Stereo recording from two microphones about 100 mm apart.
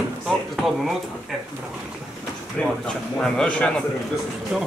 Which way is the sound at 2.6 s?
15° left (ahead or behind).